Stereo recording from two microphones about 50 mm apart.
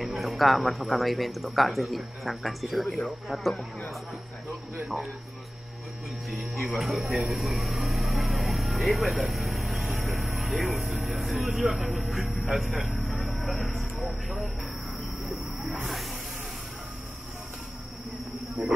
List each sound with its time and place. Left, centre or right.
0.0 s a man's voice: centre
6.7 s speech: centre
12.7 s a sound: centre
14.0 s vehicle: centre
18.6 s speech: centre